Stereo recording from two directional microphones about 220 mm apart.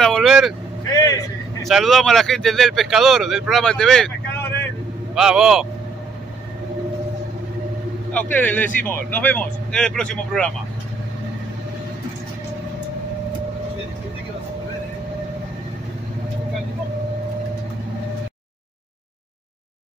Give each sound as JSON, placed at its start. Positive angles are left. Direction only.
{"t": 0.0, "sound": "vehicle", "side_deg": 0}
{"t": 0.9, "sound": "a sound", "side_deg": 15}
{"t": 1.6, "sound": "speech", "side_deg": 0}
{"t": 8.1, "sound": "speech", "side_deg": 5}